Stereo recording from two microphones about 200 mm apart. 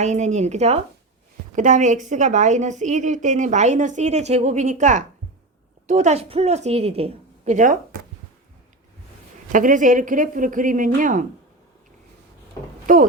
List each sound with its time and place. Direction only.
0.0 s a woman's voice: 35° right (ahead or behind)
9.5 s a woman's voice: 40° right (ahead or behind)
12.8 s a sound: 40° right (ahead or behind)